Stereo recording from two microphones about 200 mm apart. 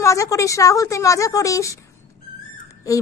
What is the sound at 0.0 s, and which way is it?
A woman's voice, 15° left (ahead or behind).